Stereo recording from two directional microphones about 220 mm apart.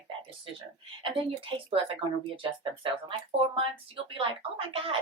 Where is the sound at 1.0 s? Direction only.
25° right (ahead or behind).